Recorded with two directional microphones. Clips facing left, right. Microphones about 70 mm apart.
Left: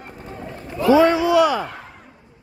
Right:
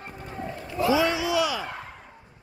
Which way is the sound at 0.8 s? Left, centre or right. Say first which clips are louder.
Left 8 dB; left.